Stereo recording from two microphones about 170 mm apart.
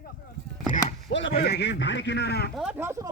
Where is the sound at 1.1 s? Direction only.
90° left; by 2.5 s 75° left (ahead or behind).